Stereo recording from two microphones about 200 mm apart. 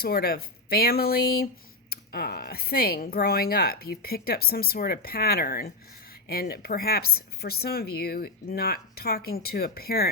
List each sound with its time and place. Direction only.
0.0 s speech: 50° left (ahead or behind)